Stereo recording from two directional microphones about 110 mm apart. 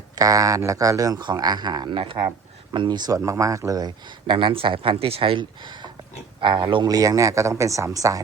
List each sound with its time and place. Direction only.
0.2 s speech: 35° right (ahead or behind)
3.2 s speech: 30° right (ahead or behind)